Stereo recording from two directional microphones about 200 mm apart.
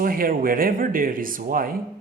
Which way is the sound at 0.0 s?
45° right (ahead or behind).